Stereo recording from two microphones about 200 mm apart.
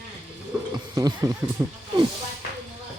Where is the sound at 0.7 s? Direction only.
20° right (ahead or behind).